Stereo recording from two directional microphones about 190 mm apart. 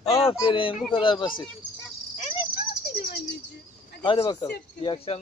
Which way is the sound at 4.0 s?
25° left (ahead or behind).